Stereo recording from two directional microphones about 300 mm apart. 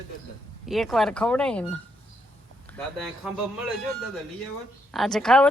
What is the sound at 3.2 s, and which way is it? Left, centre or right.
Speech, centre.